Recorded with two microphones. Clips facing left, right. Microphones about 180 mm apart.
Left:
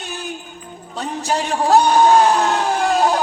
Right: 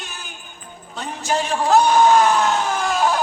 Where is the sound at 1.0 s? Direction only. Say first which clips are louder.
Left 1 dB; 35° left (ahead or behind).